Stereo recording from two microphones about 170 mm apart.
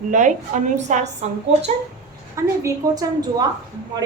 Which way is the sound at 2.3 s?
15° right (ahead or behind).